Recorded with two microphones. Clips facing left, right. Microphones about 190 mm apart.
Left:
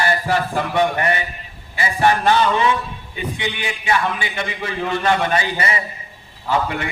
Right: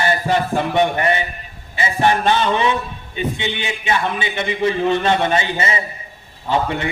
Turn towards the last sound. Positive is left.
turn(degrees=-25)  # may be behind; listen again after turning